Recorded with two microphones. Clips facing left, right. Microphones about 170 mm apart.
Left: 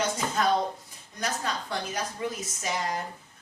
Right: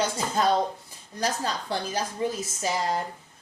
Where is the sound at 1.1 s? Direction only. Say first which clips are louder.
Right 3 dB; 30° right (ahead or behind).